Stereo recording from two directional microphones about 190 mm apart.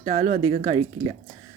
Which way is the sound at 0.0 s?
40° right (ahead or behind).